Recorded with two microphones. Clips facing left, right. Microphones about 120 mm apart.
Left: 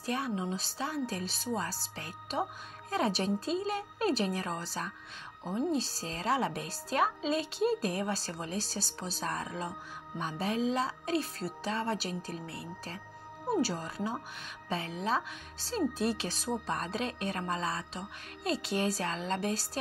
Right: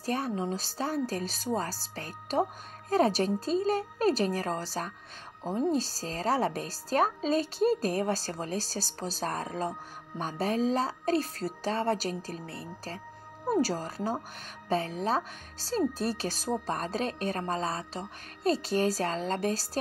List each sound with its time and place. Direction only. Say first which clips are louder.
0.0 s a woman's voice: right 3 dB; 40° right (ahead or behind)